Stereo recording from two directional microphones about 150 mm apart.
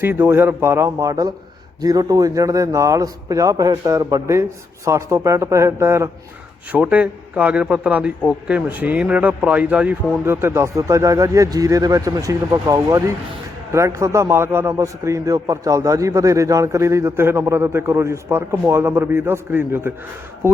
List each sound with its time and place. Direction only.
0.0 s a man's voice: 15° right (ahead or behind)